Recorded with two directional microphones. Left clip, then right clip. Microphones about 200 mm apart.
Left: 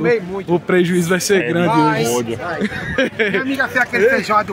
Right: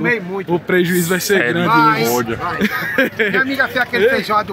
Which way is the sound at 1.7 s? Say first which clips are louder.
Right 4 dB; 50° right (ahead or behind).